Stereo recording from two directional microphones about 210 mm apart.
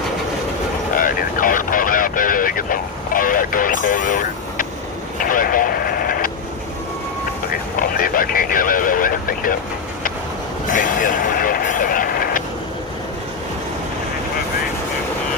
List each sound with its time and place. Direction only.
0.9 s vehicle: 40° left (ahead or behind)
7.9 s vehicle: 40° left (ahead or behind)
10.7 s vehicle: 40° left (ahead or behind)